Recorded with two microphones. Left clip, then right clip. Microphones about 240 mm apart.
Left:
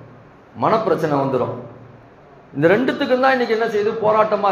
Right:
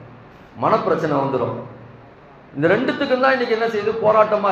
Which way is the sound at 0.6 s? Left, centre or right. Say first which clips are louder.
Left 1 dB; left.